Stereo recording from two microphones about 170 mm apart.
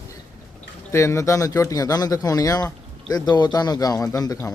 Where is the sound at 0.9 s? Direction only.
15° left (ahead or behind).